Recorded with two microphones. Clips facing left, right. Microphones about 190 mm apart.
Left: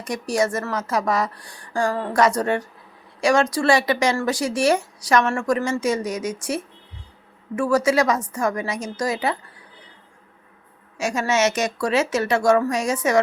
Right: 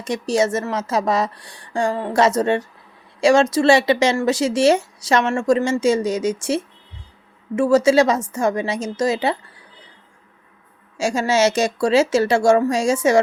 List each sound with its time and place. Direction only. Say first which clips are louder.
0.0 s speech: right 3 dB; 25° right (ahead or behind)
10.9 s speech: right 3 dB; 30° right (ahead or behind)